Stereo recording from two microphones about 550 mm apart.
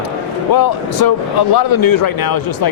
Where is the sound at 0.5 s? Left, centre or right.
Left.